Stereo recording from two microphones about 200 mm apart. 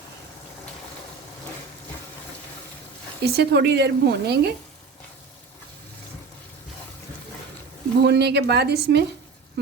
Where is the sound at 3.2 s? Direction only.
55° right (ahead or behind).